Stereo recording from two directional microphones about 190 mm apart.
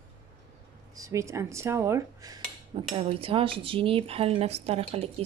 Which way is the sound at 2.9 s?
30° right (ahead or behind).